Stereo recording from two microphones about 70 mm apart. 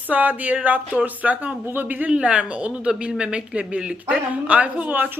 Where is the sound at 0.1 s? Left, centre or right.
Right.